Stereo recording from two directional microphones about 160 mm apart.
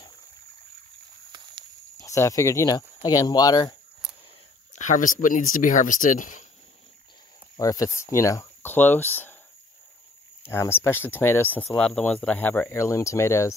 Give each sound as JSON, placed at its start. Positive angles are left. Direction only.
{"t": 2.0, "sound": "speech", "side_deg": 20}
{"t": 4.7, "sound": "speech", "side_deg": 50}
{"t": 7.5, "sound": "speech", "side_deg": 20}
{"t": 10.4, "sound": "speech", "side_deg": 15}